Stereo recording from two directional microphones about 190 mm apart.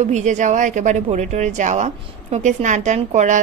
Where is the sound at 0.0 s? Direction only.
40° right (ahead or behind).